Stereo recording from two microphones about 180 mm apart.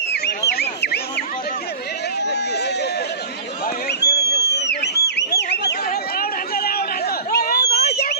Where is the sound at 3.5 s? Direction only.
55° left (ahead or behind).